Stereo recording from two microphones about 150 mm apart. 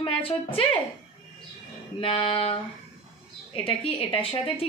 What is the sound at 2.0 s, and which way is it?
Speech, 35° left (ahead or behind).